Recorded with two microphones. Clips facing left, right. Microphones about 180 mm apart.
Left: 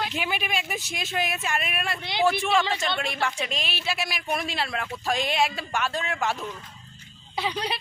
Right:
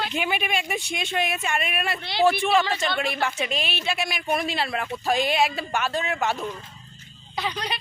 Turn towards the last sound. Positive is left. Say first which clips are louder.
# left 1 dB
turn(degrees=10)  # may be behind; listen again after turning